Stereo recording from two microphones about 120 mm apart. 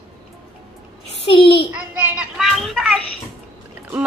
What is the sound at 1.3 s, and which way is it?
Speech, 50° left (ahead or behind).